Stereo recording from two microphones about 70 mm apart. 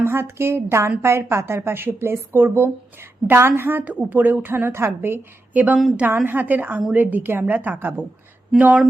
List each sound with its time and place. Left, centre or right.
0.0 s a woman's voice: right
5.5 s a woman's voice: right